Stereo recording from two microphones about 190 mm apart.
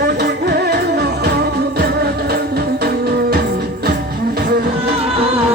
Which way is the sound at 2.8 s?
55° right (ahead or behind).